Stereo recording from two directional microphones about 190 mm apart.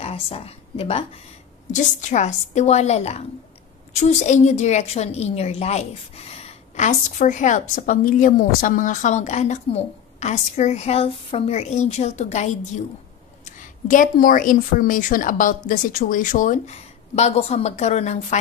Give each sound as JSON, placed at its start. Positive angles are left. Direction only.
{"t": 0.0, "sound": "a woman's voice", "side_deg": 30}
{"t": 13.8, "sound": "a woman's voice", "side_deg": 45}